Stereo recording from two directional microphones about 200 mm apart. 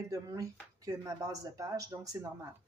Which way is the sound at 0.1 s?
15° right (ahead or behind).